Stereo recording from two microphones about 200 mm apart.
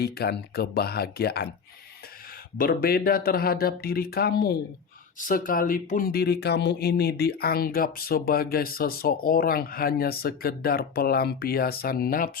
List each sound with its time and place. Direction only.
0.0 s speech: 50° left (ahead or behind)
2.6 s speech: 50° left (ahead or behind)